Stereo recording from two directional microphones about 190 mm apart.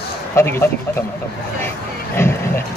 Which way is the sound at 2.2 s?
10° left (ahead or behind).